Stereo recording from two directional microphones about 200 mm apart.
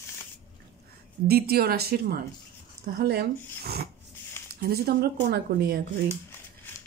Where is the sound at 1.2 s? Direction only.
50° right (ahead or behind).